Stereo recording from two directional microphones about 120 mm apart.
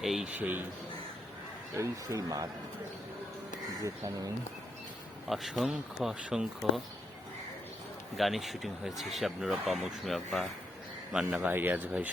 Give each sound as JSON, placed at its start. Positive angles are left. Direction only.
{"t": 0.0, "sound": "speech", "side_deg": 0}
{"t": 0.3, "sound": "speech", "side_deg": -15}
{"t": 1.7, "sound": "speech", "side_deg": -25}
{"t": 3.8, "sound": "speech", "side_deg": -30}
{"t": 5.3, "sound": "speech", "side_deg": 0}
{"t": 8.1, "sound": "speech", "side_deg": 0}
{"t": 11.4, "sound": "speech", "side_deg": -15}